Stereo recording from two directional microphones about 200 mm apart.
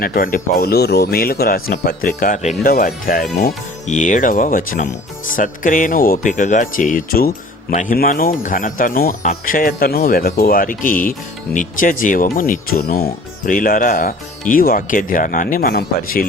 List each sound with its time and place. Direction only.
0.0 s speech: 45° left (ahead or behind)